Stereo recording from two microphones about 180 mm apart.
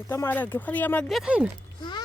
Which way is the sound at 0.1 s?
10° left (ahead or behind).